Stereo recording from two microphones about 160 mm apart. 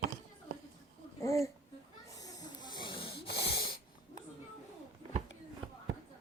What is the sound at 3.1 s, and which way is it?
Wheeze, 90° left.